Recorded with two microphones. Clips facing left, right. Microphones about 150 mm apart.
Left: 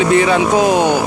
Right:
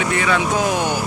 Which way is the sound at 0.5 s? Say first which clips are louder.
Left 7 dB; 90° left.